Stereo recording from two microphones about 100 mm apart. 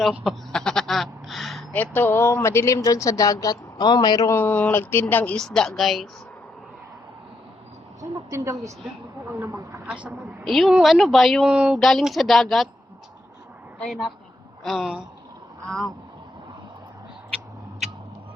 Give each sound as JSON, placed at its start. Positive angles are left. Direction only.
{"t": 0.3, "sound": "a sound", "side_deg": 5}
{"t": 1.7, "sound": "speech", "side_deg": 15}
{"t": 4.3, "sound": "speech", "side_deg": 20}
{"t": 9.3, "sound": "speech", "side_deg": -20}
{"t": 10.4, "sound": "a woman's voice", "side_deg": 0}
{"t": 10.9, "sound": "a woman's voice", "side_deg": 0}
{"t": 11.4, "sound": "speech", "side_deg": -10}
{"t": 11.8, "sound": "a woman's voice", "side_deg": 5}
{"t": 13.7, "sound": "a woman's voice", "side_deg": 5}
{"t": 15.6, "sound": "a woman's voice", "side_deg": 5}